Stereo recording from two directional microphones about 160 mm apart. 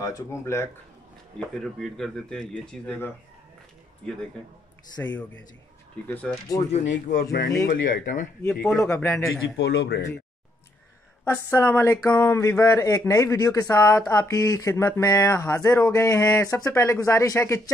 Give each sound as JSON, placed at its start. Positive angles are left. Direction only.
{"t": 0.0, "sound": "speech", "side_deg": 20}
{"t": 1.5, "sound": "speech", "side_deg": 0}
{"t": 5.0, "sound": "speech", "side_deg": 10}
{"t": 6.7, "sound": "speech", "side_deg": 55}
{"t": 7.2, "sound": "speech", "side_deg": 80}
{"t": 7.6, "sound": "speech", "side_deg": 60}
{"t": 8.7, "sound": "speech", "side_deg": 20}
{"t": 9.6, "sound": "speech", "side_deg": 90}
{"t": 11.2, "sound": "speech", "side_deg": 15}